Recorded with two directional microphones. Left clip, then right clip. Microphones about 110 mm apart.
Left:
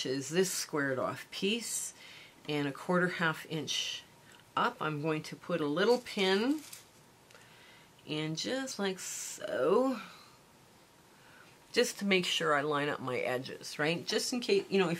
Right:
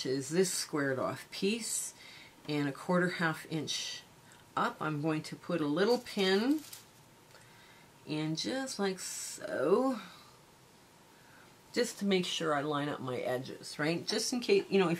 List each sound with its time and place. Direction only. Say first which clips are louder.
0.0 s speech: even; 15° left (ahead or behind)
8.1 s speech: even; 15° left (ahead or behind)
11.7 s speech: left 3 dB; 25° left (ahead or behind); by 15.0 s 5° left (ahead or behind)